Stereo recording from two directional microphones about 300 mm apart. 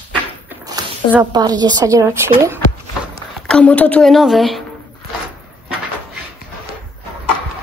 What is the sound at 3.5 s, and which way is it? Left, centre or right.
Speech, centre.